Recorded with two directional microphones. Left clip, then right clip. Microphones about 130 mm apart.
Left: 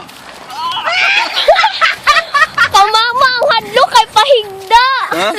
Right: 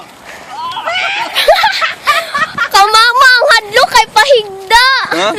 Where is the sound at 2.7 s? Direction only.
35° right (ahead or behind).